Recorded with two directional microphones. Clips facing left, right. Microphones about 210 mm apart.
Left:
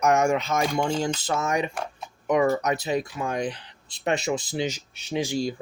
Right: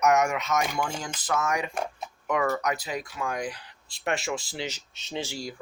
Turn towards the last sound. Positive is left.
turn(degrees=20)  # may be behind; listen again after turning